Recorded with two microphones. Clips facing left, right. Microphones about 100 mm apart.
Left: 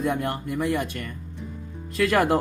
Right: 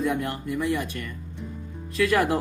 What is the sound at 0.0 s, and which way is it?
Speech, 35° left (ahead or behind).